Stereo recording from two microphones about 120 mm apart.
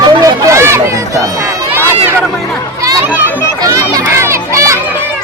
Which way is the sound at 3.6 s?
25° right (ahead or behind).